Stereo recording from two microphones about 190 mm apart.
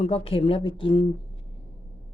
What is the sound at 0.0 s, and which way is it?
A woman's voice, 30° left (ahead or behind).